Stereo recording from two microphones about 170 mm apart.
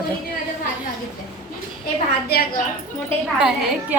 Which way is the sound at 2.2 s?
65° left (ahead or behind).